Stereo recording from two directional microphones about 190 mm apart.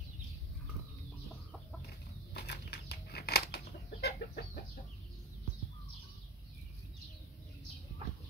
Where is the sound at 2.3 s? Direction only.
60° left (ahead or behind).